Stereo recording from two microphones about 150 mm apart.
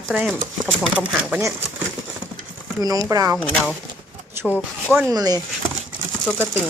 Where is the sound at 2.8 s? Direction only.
25° right (ahead or behind).